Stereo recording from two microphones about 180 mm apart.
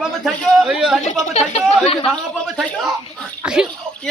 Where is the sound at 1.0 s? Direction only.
35° left (ahead or behind).